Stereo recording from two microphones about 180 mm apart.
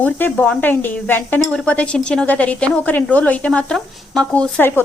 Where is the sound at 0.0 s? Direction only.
10° left (ahead or behind).